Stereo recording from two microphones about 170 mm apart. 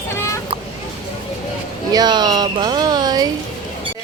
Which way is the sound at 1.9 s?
25° right (ahead or behind).